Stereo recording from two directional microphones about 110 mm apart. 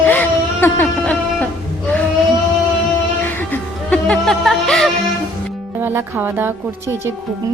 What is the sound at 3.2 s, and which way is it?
Music, 15° left (ahead or behind).